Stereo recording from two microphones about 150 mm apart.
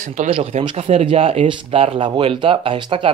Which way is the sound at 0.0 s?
55° right (ahead or behind).